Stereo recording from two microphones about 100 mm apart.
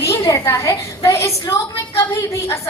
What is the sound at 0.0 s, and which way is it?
A woman's voice, 30° left (ahead or behind).